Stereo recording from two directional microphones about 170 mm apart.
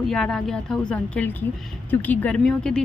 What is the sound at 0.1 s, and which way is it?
Speech, 5° left (ahead or behind).